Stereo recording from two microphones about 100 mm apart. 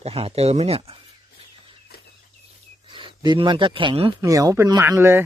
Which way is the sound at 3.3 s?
55° right (ahead or behind).